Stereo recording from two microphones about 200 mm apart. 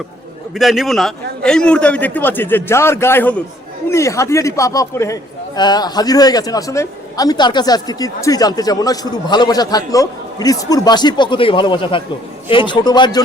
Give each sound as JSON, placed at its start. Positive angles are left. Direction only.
{"t": 0.5, "sound": "a man's voice", "side_deg": 0}